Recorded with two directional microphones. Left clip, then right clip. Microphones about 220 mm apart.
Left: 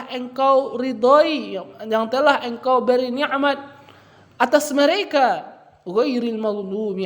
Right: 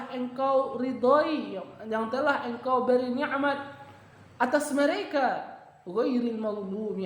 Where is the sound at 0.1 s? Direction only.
35° left (ahead or behind).